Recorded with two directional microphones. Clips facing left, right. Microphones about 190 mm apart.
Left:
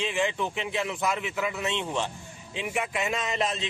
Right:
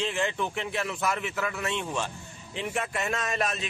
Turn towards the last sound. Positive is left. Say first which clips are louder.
# left 1 dB
turn(degrees=20)  # may be behind; listen again after turning